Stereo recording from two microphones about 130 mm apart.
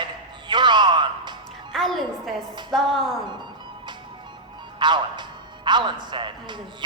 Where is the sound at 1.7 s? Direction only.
Centre (ahead or behind).